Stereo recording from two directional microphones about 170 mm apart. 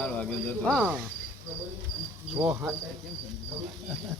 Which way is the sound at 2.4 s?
10° right (ahead or behind).